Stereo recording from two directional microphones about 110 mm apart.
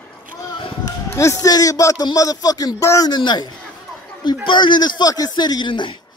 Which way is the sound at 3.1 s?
40° left (ahead or behind).